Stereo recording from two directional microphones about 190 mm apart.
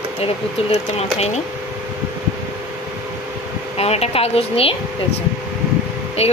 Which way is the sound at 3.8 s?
30° left (ahead or behind).